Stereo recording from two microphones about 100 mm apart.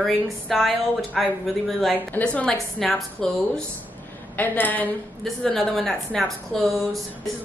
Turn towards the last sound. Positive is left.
turn(degrees=0)  # may be behind; listen again after turning